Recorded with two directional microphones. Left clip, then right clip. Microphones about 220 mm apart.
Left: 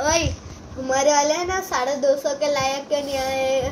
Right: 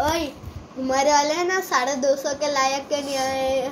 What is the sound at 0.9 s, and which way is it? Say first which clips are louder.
A child's voice: left 1 dB; 10° right (ahead or behind).